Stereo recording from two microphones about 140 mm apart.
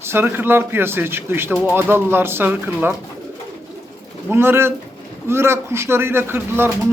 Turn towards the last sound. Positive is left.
turn(degrees=-15)  # may be behind; listen again after turning